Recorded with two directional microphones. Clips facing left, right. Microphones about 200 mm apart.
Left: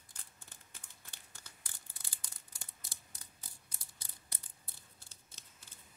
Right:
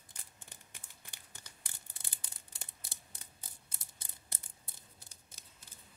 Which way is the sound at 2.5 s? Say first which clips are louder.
Right 4 dB; 25° right (ahead or behind).